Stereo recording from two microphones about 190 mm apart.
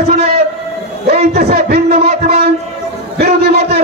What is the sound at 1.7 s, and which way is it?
Speech, 55° right (ahead or behind).